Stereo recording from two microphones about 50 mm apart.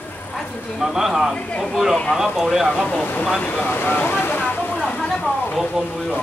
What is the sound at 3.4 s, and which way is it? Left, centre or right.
Speech, left.